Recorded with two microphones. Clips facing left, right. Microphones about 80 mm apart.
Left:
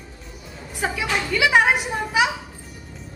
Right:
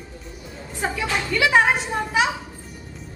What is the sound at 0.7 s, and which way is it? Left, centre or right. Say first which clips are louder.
A woman's voice: left 1 dB; centre.